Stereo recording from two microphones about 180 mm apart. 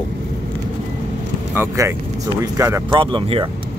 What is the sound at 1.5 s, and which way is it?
Speech, 15° right (ahead or behind).